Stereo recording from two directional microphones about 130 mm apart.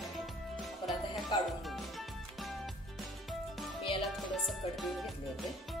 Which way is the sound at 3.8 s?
40° left (ahead or behind).